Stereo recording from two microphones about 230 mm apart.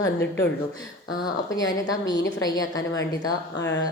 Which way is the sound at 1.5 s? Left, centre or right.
Centre.